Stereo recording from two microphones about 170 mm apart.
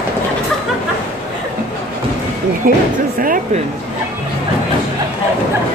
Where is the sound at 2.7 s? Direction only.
55° right (ahead or behind).